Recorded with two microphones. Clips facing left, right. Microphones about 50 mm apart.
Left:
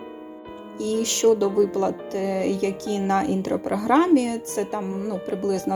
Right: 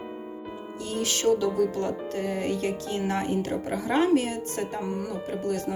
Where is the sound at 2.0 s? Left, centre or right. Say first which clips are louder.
Left 4 dB; left.